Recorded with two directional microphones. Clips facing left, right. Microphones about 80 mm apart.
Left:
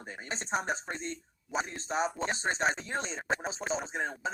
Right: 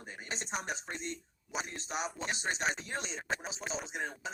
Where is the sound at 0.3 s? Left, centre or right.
Left.